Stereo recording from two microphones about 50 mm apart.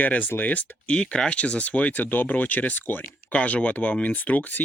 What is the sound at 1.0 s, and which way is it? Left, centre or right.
Speech, centre.